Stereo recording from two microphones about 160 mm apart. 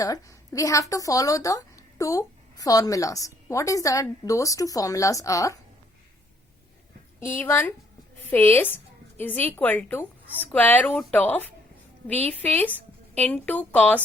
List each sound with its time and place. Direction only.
0.0 s a woman's voice: 20° left (ahead or behind)
7.2 s a woman's voice: 15° left (ahead or behind)